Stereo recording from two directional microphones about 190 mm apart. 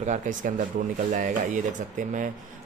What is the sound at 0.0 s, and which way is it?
Speech, 40° right (ahead or behind).